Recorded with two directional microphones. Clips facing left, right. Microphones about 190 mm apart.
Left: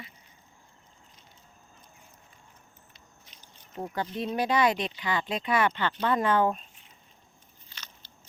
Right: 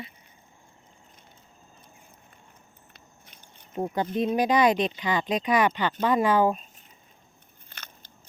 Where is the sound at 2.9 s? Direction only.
55° right (ahead or behind).